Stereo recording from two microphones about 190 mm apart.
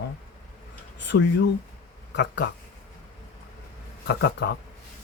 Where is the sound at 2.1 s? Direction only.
65° left (ahead or behind).